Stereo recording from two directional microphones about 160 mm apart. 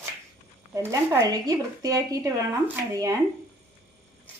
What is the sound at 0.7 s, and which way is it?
Speech, 15° right (ahead or behind).